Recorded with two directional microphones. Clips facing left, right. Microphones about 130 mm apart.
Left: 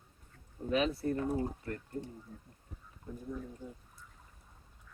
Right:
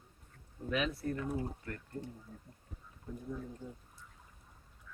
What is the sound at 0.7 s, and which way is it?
Speech, 30° left (ahead or behind).